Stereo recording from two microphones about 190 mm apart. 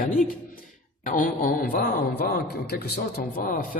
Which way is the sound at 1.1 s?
45° left (ahead or behind).